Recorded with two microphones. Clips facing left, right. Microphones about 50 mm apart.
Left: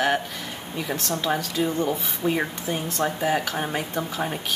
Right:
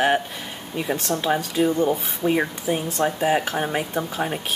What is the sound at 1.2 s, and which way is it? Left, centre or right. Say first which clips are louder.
Speech: right 4 dB; centre.